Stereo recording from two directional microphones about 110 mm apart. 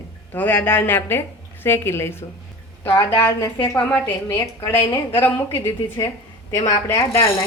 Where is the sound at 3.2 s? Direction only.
30° left (ahead or behind).